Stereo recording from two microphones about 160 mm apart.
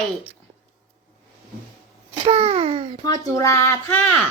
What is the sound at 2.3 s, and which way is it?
Speech, 40° right (ahead or behind).